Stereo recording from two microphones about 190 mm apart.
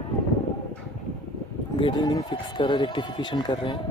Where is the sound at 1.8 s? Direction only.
25° left (ahead or behind).